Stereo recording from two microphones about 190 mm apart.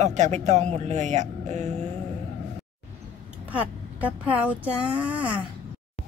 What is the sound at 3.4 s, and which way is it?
Speech, 10° right (ahead or behind).